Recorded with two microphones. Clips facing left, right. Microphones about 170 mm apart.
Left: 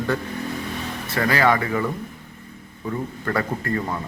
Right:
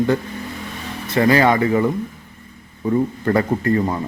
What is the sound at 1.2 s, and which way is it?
Speech, 20° right (ahead or behind).